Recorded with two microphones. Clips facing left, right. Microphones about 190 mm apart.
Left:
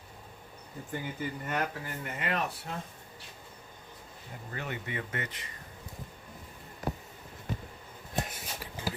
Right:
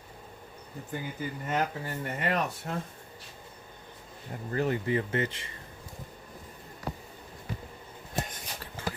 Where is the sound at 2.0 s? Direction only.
40° right (ahead or behind).